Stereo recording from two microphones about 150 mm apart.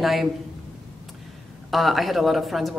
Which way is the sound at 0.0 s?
Centre (ahead or behind).